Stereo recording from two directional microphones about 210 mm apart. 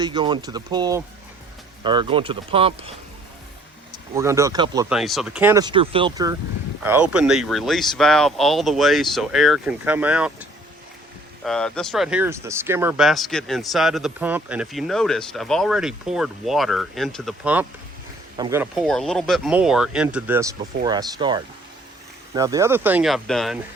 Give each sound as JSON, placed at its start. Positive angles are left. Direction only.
{"t": 0.0, "sound": "speech", "side_deg": -20}
{"t": 4.1, "sound": "speech", "side_deg": -15}
{"t": 4.9, "sound": "speech", "side_deg": 0}
{"t": 6.8, "sound": "speech", "side_deg": -5}
{"t": 11.4, "sound": "speech", "side_deg": 5}
{"t": 18.9, "sound": "speech", "side_deg": 0}